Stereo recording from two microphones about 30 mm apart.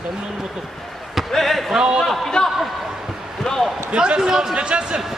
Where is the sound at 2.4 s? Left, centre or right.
Left.